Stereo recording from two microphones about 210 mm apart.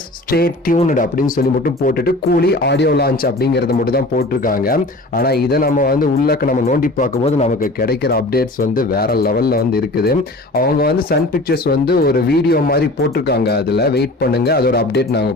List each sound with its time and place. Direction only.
0.3 s speech: 45° left (ahead or behind)
7.8 s speech: 45° left (ahead or behind)